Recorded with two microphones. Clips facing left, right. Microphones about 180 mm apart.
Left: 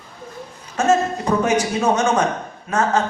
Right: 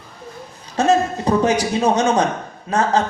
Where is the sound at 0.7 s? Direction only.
35° right (ahead or behind).